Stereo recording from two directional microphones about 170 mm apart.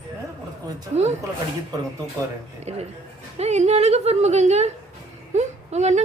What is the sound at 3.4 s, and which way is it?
A woman's voice, 40° right (ahead or behind).